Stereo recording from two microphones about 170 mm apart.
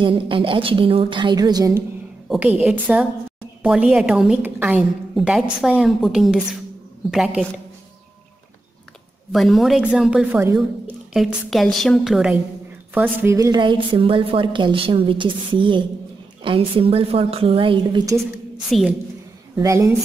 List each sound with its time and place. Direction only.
0.0 s a woman's voice: 30° right (ahead or behind)
2.2 s a woman's voice: 5° right (ahead or behind)
9.3 s a woman's voice: centre (ahead or behind); by 18.0 s 30° right (ahead or behind)
18.7 s a woman's voice: centre (ahead or behind)
19.5 s speech: 20° right (ahead or behind)